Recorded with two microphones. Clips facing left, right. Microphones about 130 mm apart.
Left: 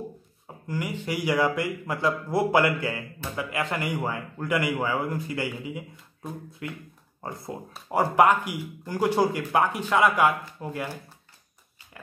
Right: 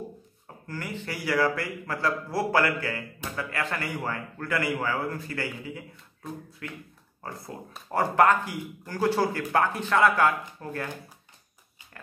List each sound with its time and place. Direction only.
0.7 s a man's voice: 15° left (ahead or behind)